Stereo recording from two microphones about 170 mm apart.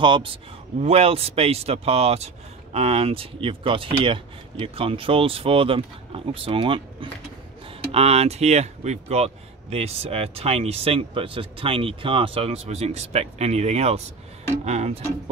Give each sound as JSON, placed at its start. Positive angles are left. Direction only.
{"t": 0.0, "sound": "a man's voice", "side_deg": -30}